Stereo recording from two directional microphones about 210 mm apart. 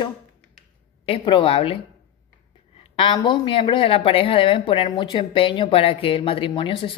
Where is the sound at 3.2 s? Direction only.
25° left (ahead or behind).